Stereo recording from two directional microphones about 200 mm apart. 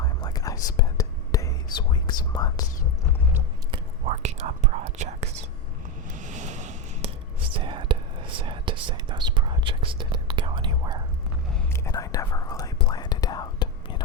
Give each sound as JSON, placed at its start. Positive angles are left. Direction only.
{"t": 0.0, "sound": "whispering", "side_deg": 20}
{"t": 4.0, "sound": "whispering", "side_deg": -35}
{"t": 6.1, "sound": "a sound", "side_deg": -40}
{"t": 7.5, "sound": "whispering", "side_deg": -25}
{"t": 11.7, "sound": "whispering", "side_deg": 15}